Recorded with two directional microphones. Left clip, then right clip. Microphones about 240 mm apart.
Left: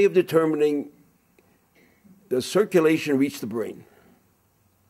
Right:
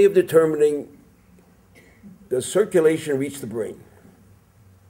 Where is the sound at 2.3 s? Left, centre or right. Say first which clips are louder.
Right 1 dB; left.